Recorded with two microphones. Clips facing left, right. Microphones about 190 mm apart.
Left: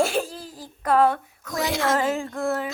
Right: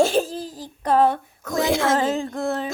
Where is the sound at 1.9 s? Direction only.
25° right (ahead or behind).